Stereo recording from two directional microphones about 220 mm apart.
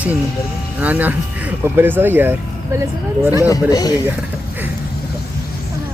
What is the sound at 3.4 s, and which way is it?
Speech, 15° left (ahead or behind).